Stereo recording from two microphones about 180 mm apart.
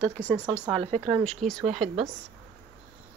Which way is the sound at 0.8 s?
35° right (ahead or behind).